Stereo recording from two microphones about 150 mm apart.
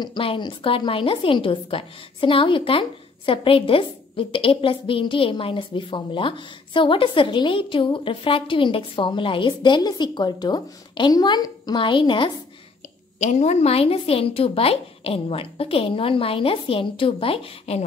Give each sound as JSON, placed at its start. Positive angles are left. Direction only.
{"t": 0.0, "sound": "a woman's voice", "side_deg": 35}
{"t": 13.2, "sound": "a woman's voice", "side_deg": 50}